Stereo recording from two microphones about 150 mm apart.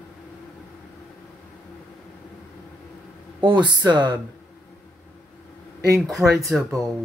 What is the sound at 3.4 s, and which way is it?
Speech, 30° right (ahead or behind).